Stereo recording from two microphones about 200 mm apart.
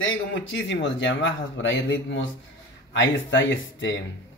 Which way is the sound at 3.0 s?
70° left (ahead or behind).